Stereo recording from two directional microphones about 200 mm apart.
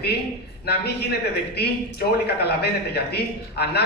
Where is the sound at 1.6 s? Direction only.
55° left (ahead or behind).